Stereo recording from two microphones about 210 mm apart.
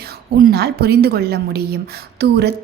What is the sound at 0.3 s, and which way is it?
A woman's voice, 45° right (ahead or behind).